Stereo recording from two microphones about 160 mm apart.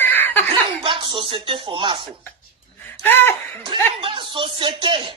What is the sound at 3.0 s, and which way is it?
Speech, 15° left (ahead or behind).